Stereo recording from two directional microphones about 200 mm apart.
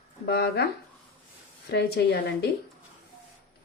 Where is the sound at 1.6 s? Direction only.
55° left (ahead or behind).